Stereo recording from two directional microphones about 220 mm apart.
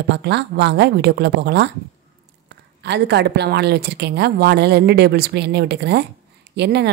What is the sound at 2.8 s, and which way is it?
Speech, 50° right (ahead or behind).